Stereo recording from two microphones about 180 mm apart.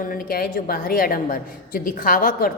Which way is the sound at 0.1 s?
55° left (ahead or behind).